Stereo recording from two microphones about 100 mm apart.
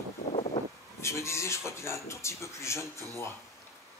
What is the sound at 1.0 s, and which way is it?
A man's voice, 30° left (ahead or behind).